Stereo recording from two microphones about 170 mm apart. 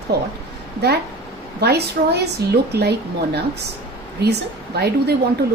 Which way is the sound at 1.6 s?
75° right (ahead or behind).